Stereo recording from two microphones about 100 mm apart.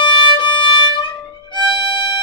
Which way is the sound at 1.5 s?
55° left (ahead or behind).